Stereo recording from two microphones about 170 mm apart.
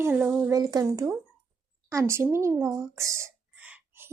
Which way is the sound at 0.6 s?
20° right (ahead or behind).